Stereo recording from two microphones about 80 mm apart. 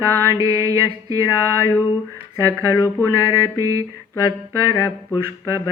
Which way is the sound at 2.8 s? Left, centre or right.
Left.